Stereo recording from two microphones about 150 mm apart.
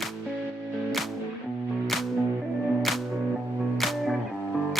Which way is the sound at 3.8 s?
Centre (ahead or behind).